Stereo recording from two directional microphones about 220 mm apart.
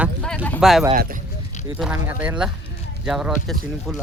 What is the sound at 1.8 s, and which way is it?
Speech, 5° right (ahead or behind).